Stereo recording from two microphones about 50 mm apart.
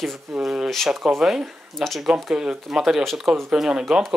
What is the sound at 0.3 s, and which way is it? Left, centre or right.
Speech, centre.